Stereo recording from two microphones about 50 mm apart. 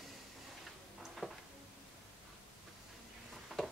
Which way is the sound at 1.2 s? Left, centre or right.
Centre.